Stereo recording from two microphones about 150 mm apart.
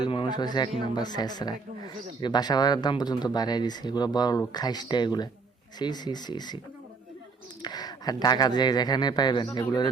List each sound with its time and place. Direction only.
0.0 s speech: 30° left (ahead or behind)
7.6 s speech: 25° left (ahead or behind)